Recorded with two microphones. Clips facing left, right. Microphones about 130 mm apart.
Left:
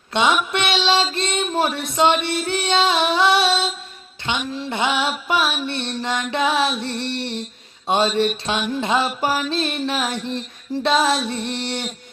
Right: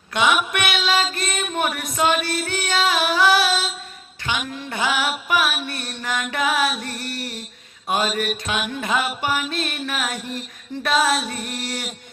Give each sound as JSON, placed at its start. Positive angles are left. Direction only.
{"t": 0.1, "sound": "mantra", "side_deg": 25}
{"t": 0.5, "sound": "music", "side_deg": 25}
{"t": 1.1, "sound": "female singing", "side_deg": 25}
{"t": 4.5, "sound": "music", "side_deg": 25}